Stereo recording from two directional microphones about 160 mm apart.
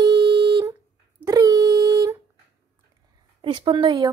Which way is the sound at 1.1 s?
20° right (ahead or behind).